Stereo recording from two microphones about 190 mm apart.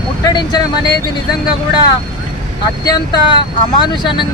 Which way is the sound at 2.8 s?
20° left (ahead or behind).